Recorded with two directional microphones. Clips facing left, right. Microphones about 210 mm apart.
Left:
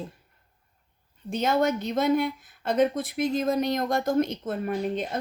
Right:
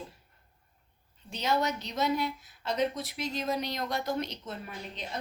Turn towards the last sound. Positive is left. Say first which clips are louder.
# left 14 dB
turn(degrees=50)  # may be behind; listen again after turning